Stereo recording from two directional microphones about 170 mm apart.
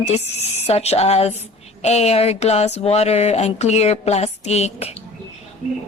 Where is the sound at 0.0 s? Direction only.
40° left (ahead or behind).